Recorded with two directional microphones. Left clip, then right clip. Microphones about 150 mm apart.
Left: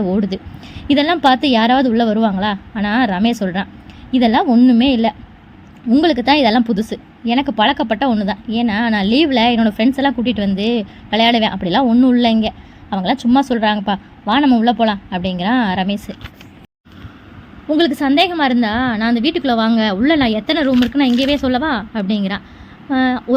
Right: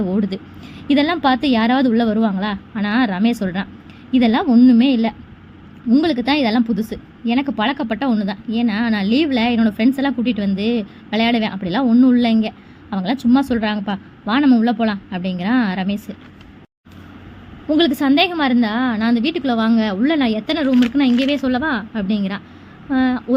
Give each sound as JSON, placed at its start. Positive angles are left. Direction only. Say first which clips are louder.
{"t": 0.0, "sound": "a woman's voice", "louder": "left 3 dB", "side_deg": 15}
{"t": 17.7, "sound": "a woman's voice", "louder": "left 1 dB", "side_deg": 5}